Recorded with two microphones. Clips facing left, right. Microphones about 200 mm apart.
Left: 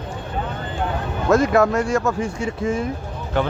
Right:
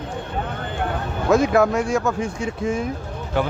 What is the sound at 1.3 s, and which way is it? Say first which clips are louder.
Speech: even; centre (ahead or behind).